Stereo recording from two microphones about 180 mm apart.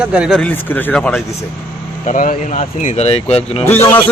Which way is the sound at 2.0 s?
45° left (ahead or behind).